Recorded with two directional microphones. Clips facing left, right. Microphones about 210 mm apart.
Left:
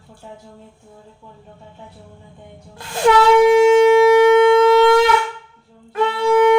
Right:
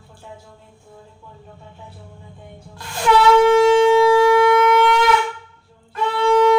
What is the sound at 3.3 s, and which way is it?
Shofar, 15° left (ahead or behind).